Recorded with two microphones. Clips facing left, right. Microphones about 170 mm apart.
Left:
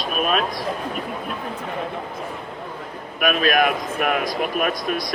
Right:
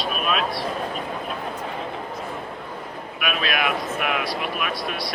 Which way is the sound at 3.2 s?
45° left (ahead or behind).